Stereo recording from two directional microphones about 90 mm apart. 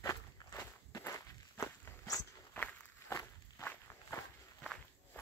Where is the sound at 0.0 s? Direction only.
40° left (ahead or behind).